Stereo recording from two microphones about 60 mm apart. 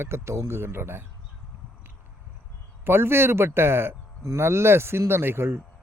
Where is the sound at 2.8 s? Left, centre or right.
Right.